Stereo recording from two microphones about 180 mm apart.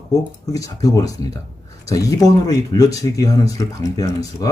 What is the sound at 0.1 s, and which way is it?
Speech, 20° left (ahead or behind).